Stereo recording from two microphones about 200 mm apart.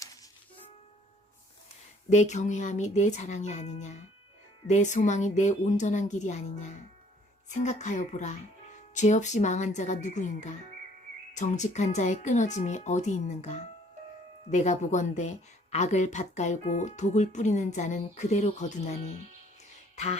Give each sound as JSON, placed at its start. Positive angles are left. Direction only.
{"t": 0.0, "sound": "music", "side_deg": 15}
{"t": 2.0, "sound": "speech", "side_deg": 35}